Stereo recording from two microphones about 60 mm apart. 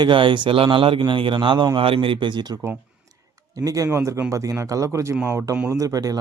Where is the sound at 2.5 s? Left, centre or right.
Right.